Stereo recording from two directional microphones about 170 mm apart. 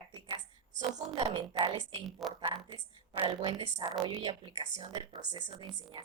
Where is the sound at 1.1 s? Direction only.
25° right (ahead or behind).